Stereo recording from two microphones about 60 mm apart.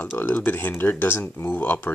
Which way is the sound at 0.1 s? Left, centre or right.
Left.